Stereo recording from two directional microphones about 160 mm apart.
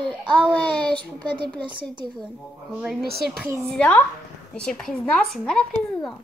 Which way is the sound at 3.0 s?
75° right (ahead or behind).